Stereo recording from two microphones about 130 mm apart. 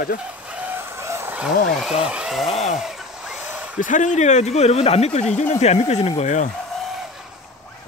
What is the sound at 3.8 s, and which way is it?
Speech, 75° left (ahead or behind).